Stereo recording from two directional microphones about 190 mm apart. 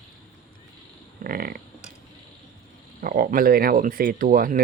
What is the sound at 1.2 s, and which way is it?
Speech, 50° right (ahead or behind).